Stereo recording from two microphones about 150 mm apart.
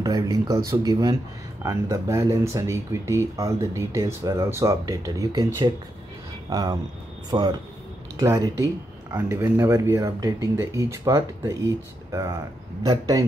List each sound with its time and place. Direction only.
0.0 s speech: 25° right (ahead or behind)